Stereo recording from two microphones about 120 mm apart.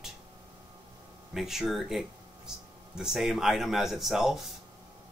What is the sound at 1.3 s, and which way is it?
Speech, 5° right (ahead or behind).